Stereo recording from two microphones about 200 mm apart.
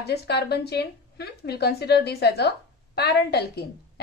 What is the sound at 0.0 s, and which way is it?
A woman's voice, 55° left (ahead or behind).